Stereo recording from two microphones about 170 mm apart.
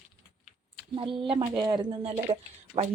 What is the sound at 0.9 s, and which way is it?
Speech, 30° right (ahead or behind).